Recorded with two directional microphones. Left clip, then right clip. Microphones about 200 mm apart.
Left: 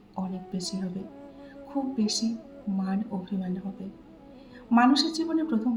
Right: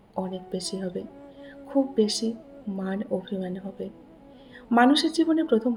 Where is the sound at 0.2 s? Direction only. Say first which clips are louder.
Right 5 dB; 35° right (ahead or behind).